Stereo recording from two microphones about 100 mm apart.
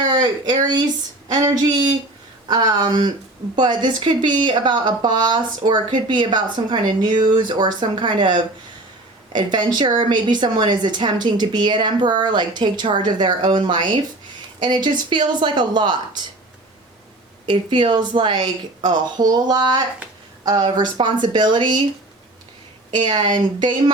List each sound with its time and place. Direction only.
0.1 s speech: 45° right (ahead or behind)
17.4 s speech: 50° right (ahead or behind)
22.9 s speech: 50° right (ahead or behind)